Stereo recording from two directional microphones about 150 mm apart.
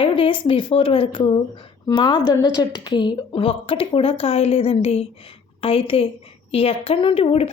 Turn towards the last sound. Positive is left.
turn(degrees=40)  # may be behind; listen again after turning